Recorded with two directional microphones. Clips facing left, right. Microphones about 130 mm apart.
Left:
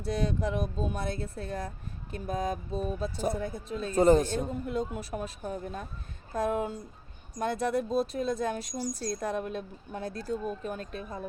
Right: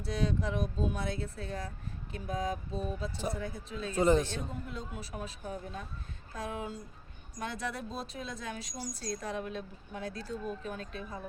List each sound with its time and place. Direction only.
0.0 s speech: 50° left (ahead or behind)